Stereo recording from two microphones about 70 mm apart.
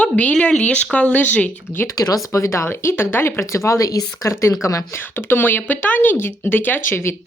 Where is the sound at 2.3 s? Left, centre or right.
Left.